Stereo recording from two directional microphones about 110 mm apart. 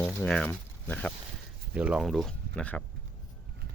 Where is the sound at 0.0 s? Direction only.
20° left (ahead or behind).